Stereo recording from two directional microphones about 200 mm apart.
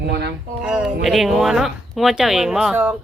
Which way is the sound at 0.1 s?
55° right (ahead or behind).